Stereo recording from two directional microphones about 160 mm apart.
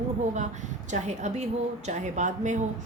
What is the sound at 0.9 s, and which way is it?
A woman's voice, 45° right (ahead or behind).